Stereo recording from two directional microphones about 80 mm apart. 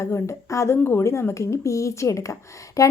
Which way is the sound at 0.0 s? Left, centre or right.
Left.